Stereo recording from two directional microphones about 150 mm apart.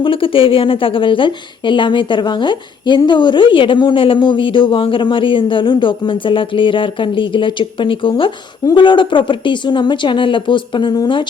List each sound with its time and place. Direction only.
0.0 s speech: 35° left (ahead or behind)